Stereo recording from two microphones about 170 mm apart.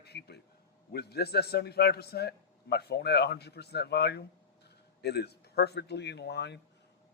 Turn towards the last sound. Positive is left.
turn(degrees=85)